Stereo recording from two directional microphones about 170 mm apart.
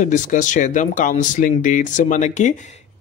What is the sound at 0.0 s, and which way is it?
Speech, 50° left (ahead or behind).